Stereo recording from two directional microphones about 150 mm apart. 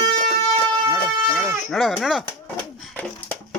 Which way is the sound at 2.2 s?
10° left (ahead or behind).